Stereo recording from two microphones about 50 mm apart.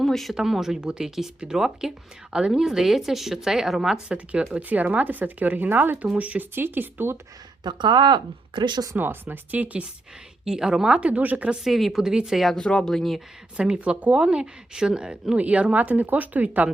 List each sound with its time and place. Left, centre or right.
0.0 s speech: centre
0.3 s speech: centre
4.1 s speech: right
6.0 s speech: right
6.5 s speech: right
9.0 s speech: right
10.4 s speech: centre
11.2 s speech: right
11.6 s a woman's voice: centre
12.5 s speech: centre
12.9 s a woman's voice: centre
13.6 s speech: right